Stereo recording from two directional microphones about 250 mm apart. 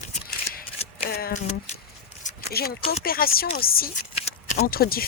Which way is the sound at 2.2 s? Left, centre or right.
Left.